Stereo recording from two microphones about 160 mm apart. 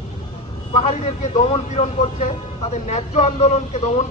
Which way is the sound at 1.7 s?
45° left (ahead or behind).